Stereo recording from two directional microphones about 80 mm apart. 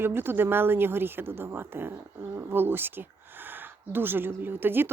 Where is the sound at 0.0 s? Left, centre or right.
Right.